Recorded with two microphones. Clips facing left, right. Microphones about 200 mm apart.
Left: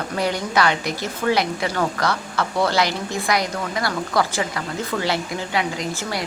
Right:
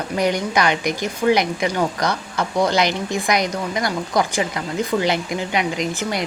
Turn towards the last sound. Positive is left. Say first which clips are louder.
# right 3 dB
turn(degrees=-20)  # may be behind; listen again after turning